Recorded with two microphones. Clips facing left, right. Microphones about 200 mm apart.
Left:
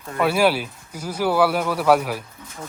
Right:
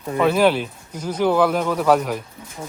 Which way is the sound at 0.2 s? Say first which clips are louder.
Right 2 dB; 10° left (ahead or behind).